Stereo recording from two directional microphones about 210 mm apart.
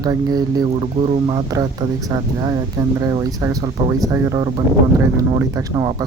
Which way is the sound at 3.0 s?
15° right (ahead or behind).